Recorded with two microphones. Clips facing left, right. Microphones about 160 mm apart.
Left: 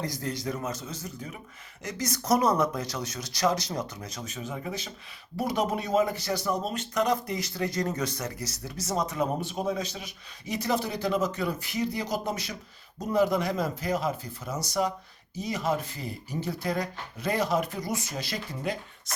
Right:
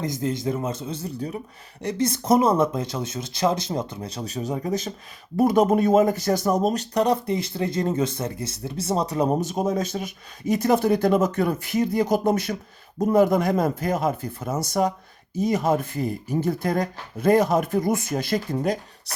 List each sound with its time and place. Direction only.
0.0 s speech: 20° right (ahead or behind); by 19.1 s 45° right (ahead or behind)